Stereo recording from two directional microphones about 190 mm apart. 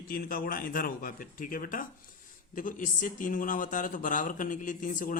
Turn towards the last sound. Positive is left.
turn(degrees=45)  # may be behind; listen again after turning